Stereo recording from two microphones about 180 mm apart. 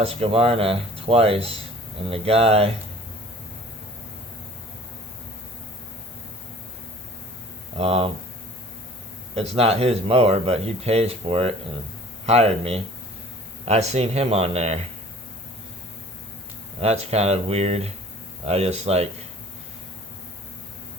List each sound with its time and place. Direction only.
0.0 s speech: 30° right (ahead or behind)
7.8 s speech: 35° right (ahead or behind)
9.3 s speech: 35° right (ahead or behind)
16.8 s speech: 35° right (ahead or behind)